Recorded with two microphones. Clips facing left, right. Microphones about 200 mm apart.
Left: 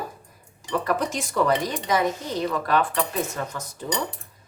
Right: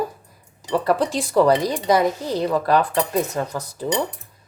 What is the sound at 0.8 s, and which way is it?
Speech, 35° right (ahead or behind).